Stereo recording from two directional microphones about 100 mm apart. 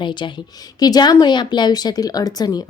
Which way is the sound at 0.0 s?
50° left (ahead or behind).